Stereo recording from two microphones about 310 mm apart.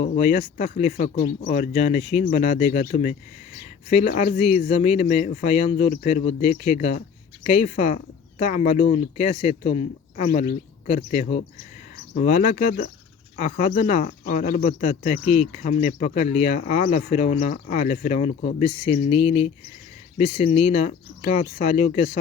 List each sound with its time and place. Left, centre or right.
0.2 s speech: left